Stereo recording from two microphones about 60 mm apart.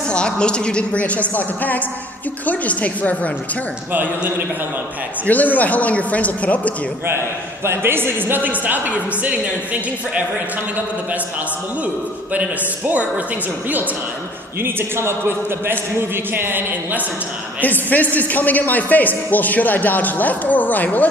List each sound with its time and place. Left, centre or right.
0.1 s a man's voice: centre
3.9 s speech: right
5.2 s a man's voice: left
7.6 s speech: right
11.8 s a man's voice: right
14.6 s speech: right
17.6 s a man's voice: left